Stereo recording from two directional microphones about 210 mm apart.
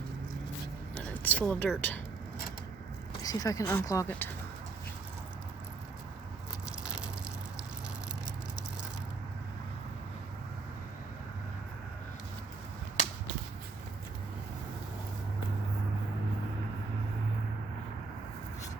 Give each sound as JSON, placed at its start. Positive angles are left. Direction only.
{"t": 1.1, "sound": "speech", "side_deg": 5}
{"t": 3.2, "sound": "speech", "side_deg": 15}
{"t": 13.0, "sound": "a sound", "side_deg": 35}